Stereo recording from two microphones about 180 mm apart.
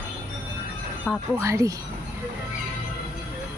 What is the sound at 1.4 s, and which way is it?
Speech, 15° right (ahead or behind).